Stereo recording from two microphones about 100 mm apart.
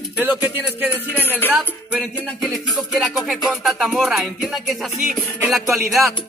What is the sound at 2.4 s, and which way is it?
Music, centre (ahead or behind).